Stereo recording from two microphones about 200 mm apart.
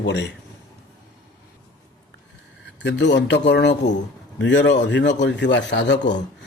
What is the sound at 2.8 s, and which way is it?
A man's voice, 60° left (ahead or behind).